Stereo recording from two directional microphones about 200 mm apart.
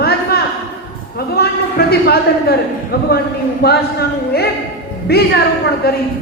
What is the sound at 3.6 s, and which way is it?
A man's voice, 50° left (ahead or behind).